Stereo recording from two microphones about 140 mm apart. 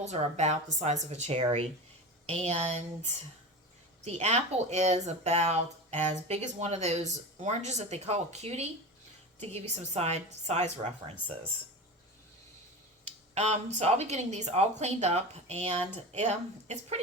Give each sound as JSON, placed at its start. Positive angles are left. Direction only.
{"t": 0.0, "sound": "speech", "side_deg": -55}
{"t": 13.1, "sound": "speech", "side_deg": -55}